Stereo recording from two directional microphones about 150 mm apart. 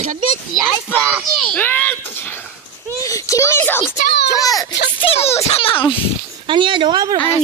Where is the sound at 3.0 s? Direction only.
20° left (ahead or behind).